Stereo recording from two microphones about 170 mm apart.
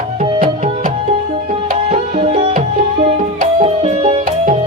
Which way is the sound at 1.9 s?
40° right (ahead or behind).